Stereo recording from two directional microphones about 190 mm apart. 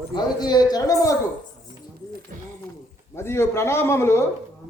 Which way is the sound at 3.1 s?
15° left (ahead or behind).